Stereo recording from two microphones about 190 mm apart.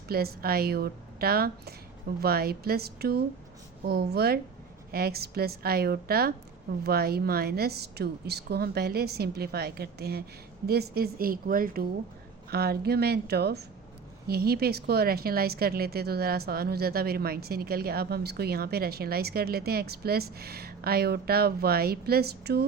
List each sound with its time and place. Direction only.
0.1 s a woman's voice: 55° right (ahead or behind)